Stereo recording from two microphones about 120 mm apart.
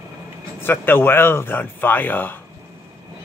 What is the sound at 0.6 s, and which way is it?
Speech, 20° left (ahead or behind).